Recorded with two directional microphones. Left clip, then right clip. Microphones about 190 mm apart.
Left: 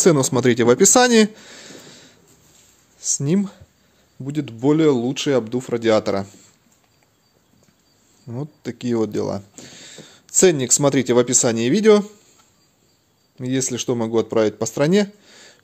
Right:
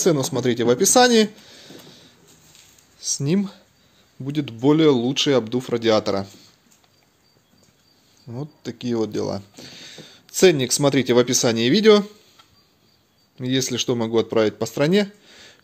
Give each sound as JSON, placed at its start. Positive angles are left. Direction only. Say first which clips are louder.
{"t": 0.0, "sound": "speech", "louder": "left 4 dB", "side_deg": 45}
{"t": 3.2, "sound": "speech", "louder": "left 1 dB", "side_deg": 15}
{"t": 8.3, "sound": "speech", "louder": "left 2 dB", "side_deg": 30}
{"t": 13.4, "sound": "speech", "louder": "right 1 dB", "side_deg": 10}